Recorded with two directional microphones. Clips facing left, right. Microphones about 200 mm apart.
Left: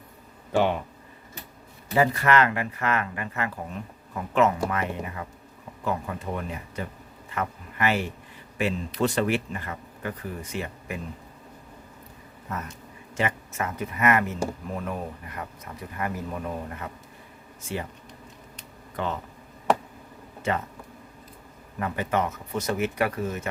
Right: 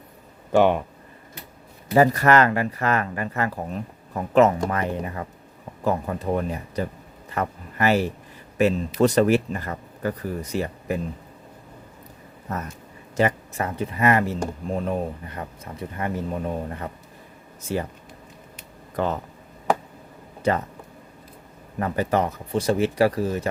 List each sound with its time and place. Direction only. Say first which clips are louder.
1.9 s speech: right 5 dB; 40° right (ahead or behind)
12.5 s speech: right 4 dB; 40° right (ahead or behind)
18.9 s speech: right 5 dB; 40° right (ahead or behind)
21.8 s speech: right 4 dB; 35° right (ahead or behind)